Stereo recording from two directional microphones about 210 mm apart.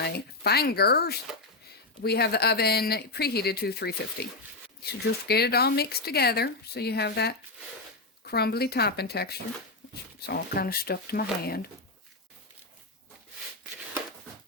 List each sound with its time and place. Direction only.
0.0 s speech: 50° left (ahead or behind)
5.3 s speech: 50° left (ahead or behind)